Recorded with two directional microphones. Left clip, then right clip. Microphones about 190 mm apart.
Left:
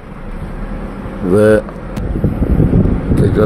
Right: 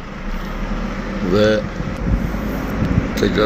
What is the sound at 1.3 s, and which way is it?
Speech, 45° left (ahead or behind).